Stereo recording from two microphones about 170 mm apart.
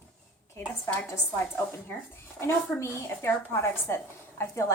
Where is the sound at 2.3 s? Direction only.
15° left (ahead or behind).